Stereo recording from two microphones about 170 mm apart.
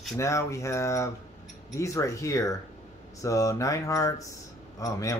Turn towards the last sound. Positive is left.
turn(degrees=20)  # may be behind; listen again after turning